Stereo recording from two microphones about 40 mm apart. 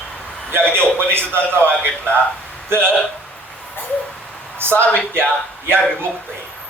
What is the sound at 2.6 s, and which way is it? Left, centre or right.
Speech, right.